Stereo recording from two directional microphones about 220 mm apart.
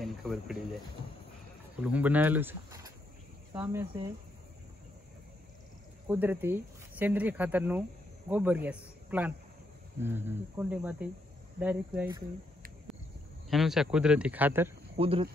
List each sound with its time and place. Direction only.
0.0 s speech: centre (ahead or behind)
1.8 s speech: 5° right (ahead or behind)
6.0 s a man's voice: 10° right (ahead or behind)
13.5 s speech: centre (ahead or behind)
15.0 s speech: 25° right (ahead or behind)